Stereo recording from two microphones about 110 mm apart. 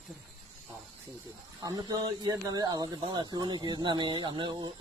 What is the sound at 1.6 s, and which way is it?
Speech, 35° right (ahead or behind).